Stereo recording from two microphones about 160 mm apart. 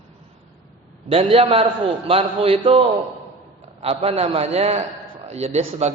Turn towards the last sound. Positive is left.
turn(degrees=-45)  # may be behind; listen again after turning